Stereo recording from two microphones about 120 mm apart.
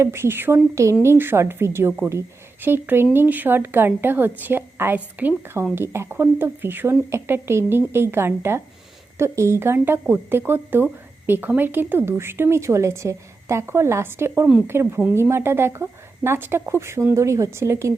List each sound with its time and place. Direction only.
0.0 s a woman's voice: 20° right (ahead or behind)